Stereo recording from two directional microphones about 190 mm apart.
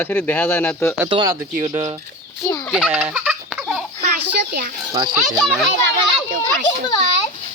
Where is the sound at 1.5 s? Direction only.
40° right (ahead or behind).